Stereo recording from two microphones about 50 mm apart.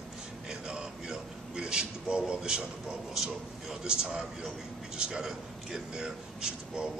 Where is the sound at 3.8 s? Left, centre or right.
Centre.